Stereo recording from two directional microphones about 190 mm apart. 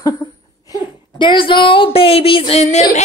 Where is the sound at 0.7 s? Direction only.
20° left (ahead or behind).